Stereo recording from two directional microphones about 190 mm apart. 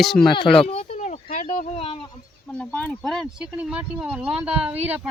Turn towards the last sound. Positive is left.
turn(degrees=-5)  # may be behind; listen again after turning